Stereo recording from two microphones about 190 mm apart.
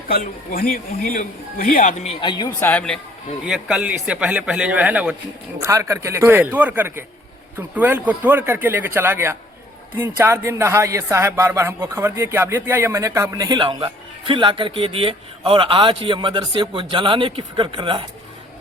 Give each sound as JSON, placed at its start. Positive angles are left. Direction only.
{"t": 0.1, "sound": "speech", "side_deg": 50}
{"t": 2.2, "sound": "speech", "side_deg": 25}
{"t": 2.6, "sound": "a man's voice", "side_deg": 10}